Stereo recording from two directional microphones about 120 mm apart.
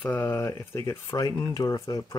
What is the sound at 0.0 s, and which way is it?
Speech, 15° left (ahead or behind).